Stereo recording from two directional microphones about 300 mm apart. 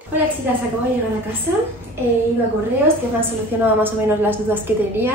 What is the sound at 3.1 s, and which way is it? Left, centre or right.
A woman's voice, centre.